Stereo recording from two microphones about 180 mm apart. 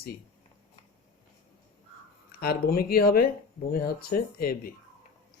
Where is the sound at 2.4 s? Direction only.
60° left (ahead or behind).